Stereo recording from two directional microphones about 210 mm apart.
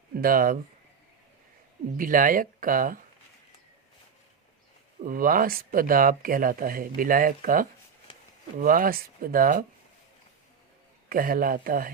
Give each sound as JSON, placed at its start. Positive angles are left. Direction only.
{"t": 0.2, "sound": "speech", "side_deg": -40}
{"t": 2.0, "sound": "speech", "side_deg": -40}
{"t": 5.0, "sound": "speech", "side_deg": -40}
{"t": 11.1, "sound": "speech", "side_deg": -45}